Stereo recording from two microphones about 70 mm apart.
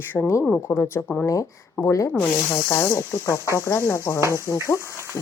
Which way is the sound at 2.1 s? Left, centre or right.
Left.